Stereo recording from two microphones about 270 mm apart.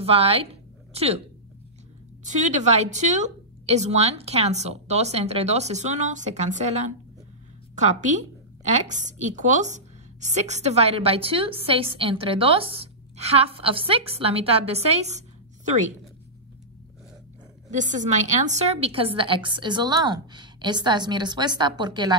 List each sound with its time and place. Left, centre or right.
0.0 s a woman's voice: right
2.2 s a woman's voice: right
17.6 s a woman's voice: right